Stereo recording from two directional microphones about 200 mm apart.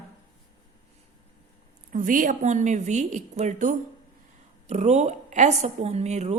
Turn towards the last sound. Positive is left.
turn(degrees=-35)  # may be behind; listen again after turning